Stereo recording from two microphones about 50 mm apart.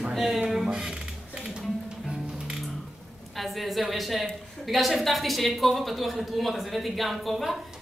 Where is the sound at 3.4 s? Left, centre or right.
Centre.